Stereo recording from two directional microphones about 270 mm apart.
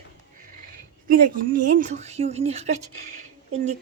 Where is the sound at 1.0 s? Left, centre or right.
Right.